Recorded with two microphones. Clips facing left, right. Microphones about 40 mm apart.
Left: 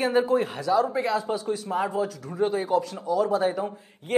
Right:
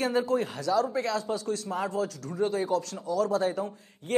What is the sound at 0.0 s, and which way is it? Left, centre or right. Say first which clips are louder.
A man's voice: left 4 dB; left.